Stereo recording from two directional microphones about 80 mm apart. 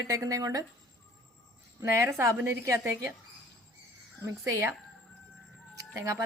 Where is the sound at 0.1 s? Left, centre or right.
Right.